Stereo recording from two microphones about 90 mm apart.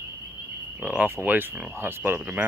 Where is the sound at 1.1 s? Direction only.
25° right (ahead or behind).